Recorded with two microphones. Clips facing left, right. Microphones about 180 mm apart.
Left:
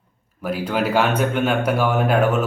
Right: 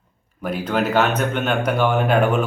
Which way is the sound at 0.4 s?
5° left (ahead or behind).